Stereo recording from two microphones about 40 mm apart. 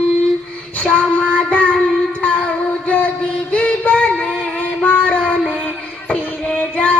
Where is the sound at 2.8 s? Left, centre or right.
Left.